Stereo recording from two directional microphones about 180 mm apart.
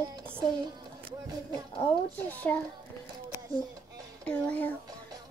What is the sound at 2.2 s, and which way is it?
Speech, 10° left (ahead or behind).